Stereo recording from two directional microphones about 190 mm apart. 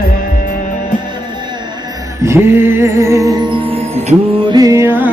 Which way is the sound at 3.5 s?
30° right (ahead or behind).